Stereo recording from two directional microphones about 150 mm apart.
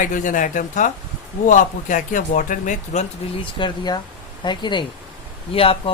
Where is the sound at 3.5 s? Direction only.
30° left (ahead or behind).